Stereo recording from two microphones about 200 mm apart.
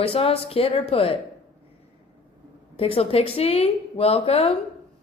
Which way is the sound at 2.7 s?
30° left (ahead or behind).